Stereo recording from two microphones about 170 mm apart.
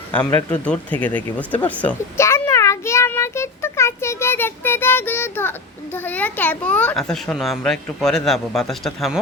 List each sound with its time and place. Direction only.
0.1 s a child's voice: 10° left (ahead or behind)